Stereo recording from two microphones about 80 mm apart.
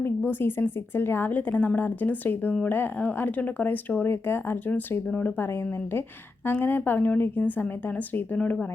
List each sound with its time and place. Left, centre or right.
0.0 s speech: left